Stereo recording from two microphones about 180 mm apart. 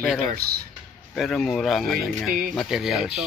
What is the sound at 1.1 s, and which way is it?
Speech, centre (ahead or behind).